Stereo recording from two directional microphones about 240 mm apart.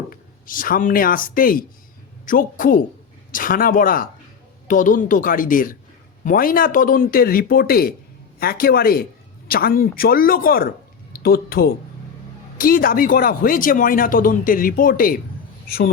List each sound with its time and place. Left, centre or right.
0.1 s speech: left